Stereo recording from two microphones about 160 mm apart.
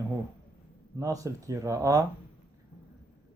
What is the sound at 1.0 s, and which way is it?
Speech, 20° right (ahead or behind).